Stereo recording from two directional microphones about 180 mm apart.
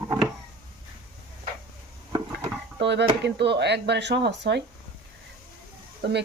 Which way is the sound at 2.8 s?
75° right (ahead or behind).